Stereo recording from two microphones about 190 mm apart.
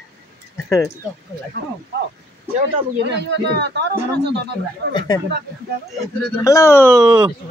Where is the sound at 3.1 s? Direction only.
65° right (ahead or behind).